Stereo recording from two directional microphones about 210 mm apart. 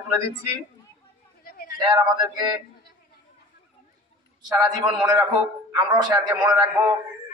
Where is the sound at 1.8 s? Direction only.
20° right (ahead or behind).